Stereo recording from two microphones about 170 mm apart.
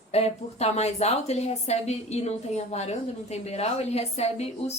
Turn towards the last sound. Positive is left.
turn(degrees=40)  # may be behind; listen again after turning